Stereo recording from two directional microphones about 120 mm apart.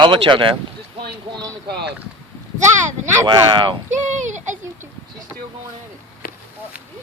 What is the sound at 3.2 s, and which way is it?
Speech, 35° right (ahead or behind).